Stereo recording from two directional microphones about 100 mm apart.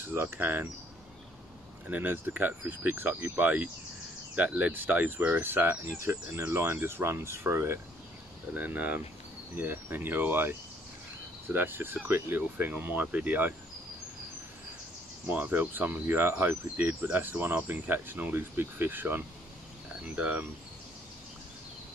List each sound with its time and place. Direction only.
0.0 s speech: 25° right (ahead or behind)
1.9 s speech: 15° right (ahead or behind)
11.5 s speech: 20° right (ahead or behind)
15.2 s speech: 15° right (ahead or behind)